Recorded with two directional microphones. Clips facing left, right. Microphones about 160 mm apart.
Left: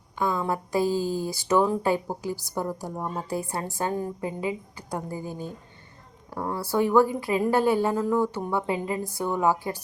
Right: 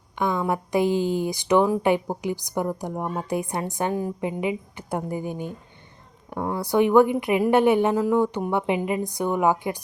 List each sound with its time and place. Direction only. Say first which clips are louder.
0.2 s speech: right 2 dB; 20° right (ahead or behind)